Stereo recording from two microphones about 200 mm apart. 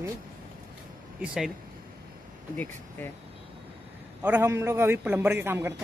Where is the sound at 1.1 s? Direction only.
5° right (ahead or behind).